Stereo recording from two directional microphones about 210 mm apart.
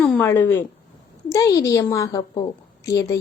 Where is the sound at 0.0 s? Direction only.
10° left (ahead or behind).